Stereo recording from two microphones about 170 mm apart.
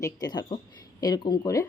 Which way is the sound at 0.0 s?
25° left (ahead or behind).